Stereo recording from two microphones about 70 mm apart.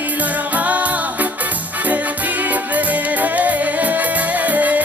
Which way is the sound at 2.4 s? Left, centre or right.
Right.